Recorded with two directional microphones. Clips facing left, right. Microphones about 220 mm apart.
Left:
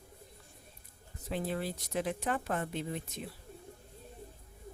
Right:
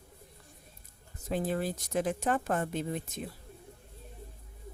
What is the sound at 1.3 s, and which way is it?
Speech, 45° right (ahead or behind).